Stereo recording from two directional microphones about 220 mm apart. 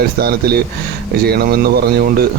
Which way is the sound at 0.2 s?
45° right (ahead or behind).